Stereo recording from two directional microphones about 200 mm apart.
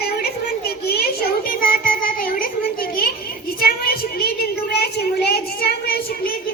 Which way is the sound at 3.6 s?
50° left (ahead or behind).